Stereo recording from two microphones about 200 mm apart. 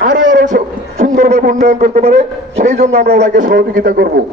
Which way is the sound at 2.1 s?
55° right (ahead or behind).